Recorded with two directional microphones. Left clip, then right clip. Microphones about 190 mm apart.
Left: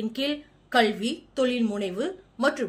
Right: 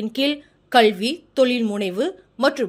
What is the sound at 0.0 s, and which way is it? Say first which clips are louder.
A woman's voice: right 6 dB; 45° right (ahead or behind).